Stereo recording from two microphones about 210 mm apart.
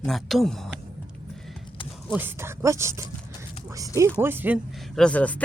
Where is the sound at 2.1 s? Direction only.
10° right (ahead or behind).